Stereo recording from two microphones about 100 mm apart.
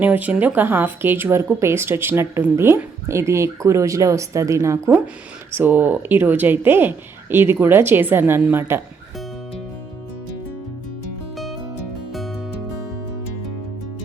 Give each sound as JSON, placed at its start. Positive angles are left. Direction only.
{"t": 0.0, "sound": "speech", "side_deg": -15}
{"t": 5.5, "sound": "speech", "side_deg": -20}